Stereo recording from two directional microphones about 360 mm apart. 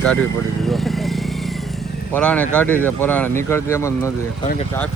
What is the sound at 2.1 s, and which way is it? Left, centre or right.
Speech, centre.